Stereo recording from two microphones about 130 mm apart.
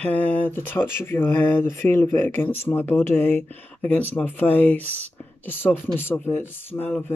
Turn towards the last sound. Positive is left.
turn(degrees=15)  # may be behind; listen again after turning